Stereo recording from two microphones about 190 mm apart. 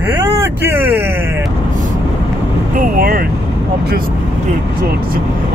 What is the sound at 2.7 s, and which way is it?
Vehicle, 50° right (ahead or behind).